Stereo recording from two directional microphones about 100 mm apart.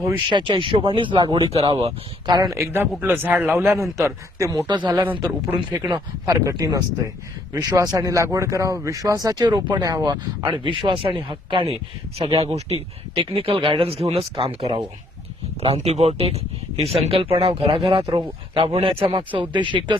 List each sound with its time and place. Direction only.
0.3 s speech: 55° right (ahead or behind)
1.5 s speech: 75° right (ahead or behind); by 2.3 s 60° right (ahead or behind)
2.3 s speech: 40° right (ahead or behind)
2.6 s a man's voice: 20° right (ahead or behind)
5.5 s speech: 50° right (ahead or behind); by 12.7 s 90° right
13.1 s speech: 65° right (ahead or behind)
15.6 s speech: 85° right; by 19.2 s 65° right (ahead or behind)
19.4 s speech: 55° right (ahead or behind)